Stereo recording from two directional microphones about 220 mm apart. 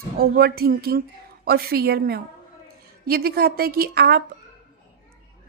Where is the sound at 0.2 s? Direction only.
45° right (ahead or behind).